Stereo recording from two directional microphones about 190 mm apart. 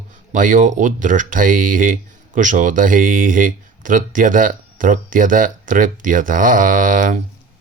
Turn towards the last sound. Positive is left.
turn(degrees=-45)  # may be behind; listen again after turning